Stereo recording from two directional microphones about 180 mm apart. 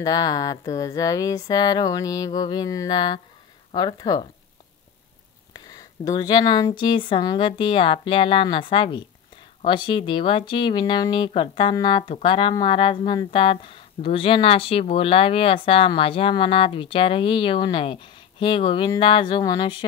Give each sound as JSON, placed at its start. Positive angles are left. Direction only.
{"t": 0.0, "sound": "speech", "side_deg": 20}
{"t": 5.5, "sound": "a sound", "side_deg": 20}
{"t": 6.8, "sound": "speech", "side_deg": 30}